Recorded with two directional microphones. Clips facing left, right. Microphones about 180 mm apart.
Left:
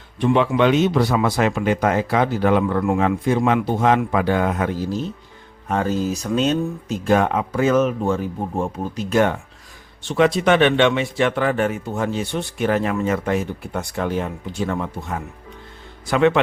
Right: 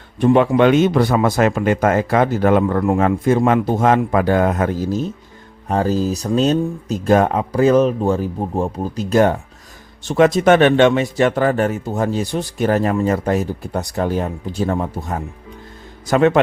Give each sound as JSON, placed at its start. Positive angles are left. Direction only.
{"t": 0.2, "sound": "speech", "side_deg": -40}
{"t": 5.6, "sound": "speech", "side_deg": -35}